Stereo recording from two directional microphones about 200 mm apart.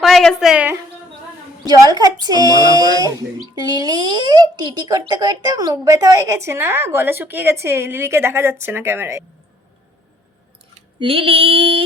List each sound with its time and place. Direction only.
0.0 s a woman's voice: centre (ahead or behind)
1.6 s a child's voice: 20° right (ahead or behind)
2.4 s a sound: 20° left (ahead or behind)
3.8 s speech: 20° right (ahead or behind)
10.8 s female singing: 25° right (ahead or behind)